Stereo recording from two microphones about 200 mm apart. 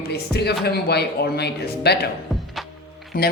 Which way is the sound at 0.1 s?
55° left (ahead or behind).